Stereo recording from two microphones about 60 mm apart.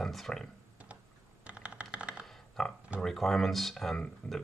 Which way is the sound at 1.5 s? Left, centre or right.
Right.